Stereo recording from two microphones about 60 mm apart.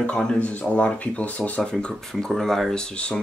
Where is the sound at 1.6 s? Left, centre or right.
Centre.